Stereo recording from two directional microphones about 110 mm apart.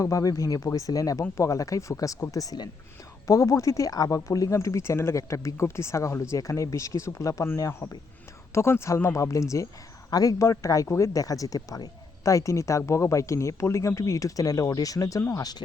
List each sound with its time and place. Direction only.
0.0 s speech: 30° left (ahead or behind)